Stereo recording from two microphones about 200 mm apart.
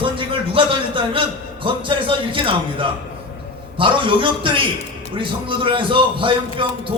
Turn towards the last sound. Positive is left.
turn(degrees=-25)  # may be behind; listen again after turning